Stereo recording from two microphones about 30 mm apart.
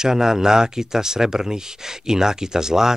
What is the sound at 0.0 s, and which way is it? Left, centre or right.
Speech, centre.